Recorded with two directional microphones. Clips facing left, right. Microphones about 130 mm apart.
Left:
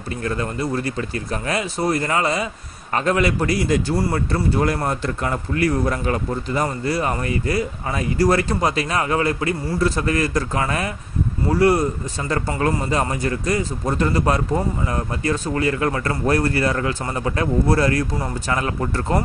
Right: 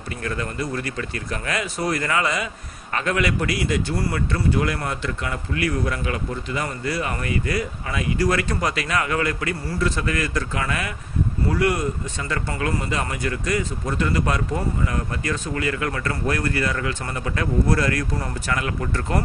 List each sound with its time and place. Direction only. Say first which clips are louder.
0.2 s a man's voice: left 3 dB; 30° left (ahead or behind)